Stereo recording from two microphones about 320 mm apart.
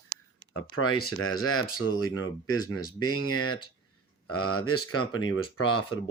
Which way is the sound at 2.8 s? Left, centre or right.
Centre.